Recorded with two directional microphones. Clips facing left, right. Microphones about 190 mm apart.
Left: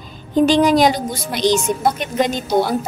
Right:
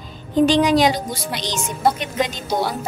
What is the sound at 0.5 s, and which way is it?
A woman's voice, 45° left (ahead or behind).